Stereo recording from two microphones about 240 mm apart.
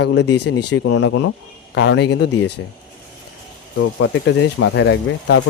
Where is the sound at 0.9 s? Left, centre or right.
Left.